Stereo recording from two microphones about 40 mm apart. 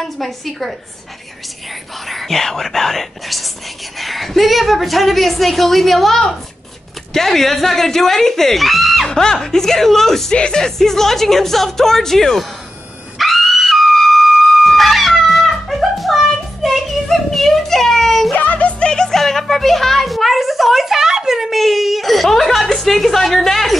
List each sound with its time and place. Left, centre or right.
0.0 s a woman's voice: centre
2.0 s a woman's voice: centre
9.1 s speech: centre
10.3 s speech: centre
13.2 s music: centre
18.3 s music: left; by 23.8 s centre